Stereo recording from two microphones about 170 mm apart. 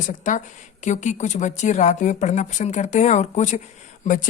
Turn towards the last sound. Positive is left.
turn(degrees=45)  # may be behind; listen again after turning